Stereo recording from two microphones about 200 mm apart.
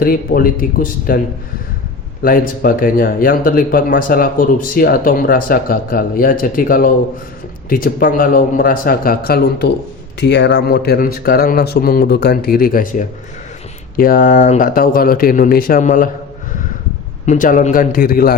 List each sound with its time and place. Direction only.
0.0 s speech: 45° left (ahead or behind)
2.2 s speech: 45° left (ahead or behind)
17.2 s speech: 40° left (ahead or behind)